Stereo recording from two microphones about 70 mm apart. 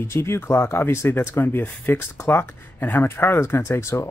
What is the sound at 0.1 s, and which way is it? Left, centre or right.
Speech, left.